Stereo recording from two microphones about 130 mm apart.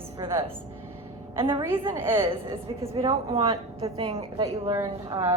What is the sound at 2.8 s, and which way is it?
A woman's voice, 50° right (ahead or behind).